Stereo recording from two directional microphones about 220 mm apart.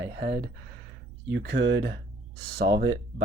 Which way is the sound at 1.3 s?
50° right (ahead or behind).